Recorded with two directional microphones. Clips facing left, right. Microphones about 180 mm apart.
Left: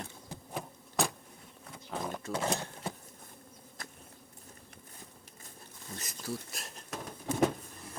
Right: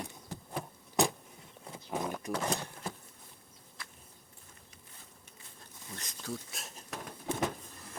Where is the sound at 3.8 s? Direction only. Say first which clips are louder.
Left 3 dB; 45° left (ahead or behind).